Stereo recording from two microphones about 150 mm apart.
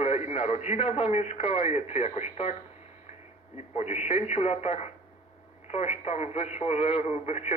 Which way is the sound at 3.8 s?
50° left (ahead or behind).